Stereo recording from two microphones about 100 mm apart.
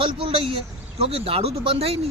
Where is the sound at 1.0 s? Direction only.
85° right.